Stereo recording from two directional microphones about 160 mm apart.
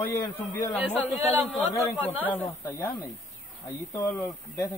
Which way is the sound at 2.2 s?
10° left (ahead or behind).